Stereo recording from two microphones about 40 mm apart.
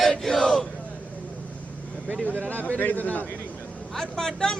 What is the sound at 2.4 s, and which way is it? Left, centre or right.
Speech, left.